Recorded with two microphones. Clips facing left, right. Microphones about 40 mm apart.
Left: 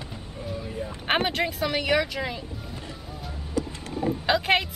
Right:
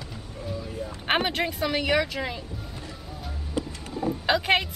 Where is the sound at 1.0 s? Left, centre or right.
Centre.